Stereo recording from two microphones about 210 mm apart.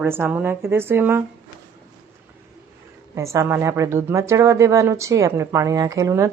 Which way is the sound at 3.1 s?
15° right (ahead or behind).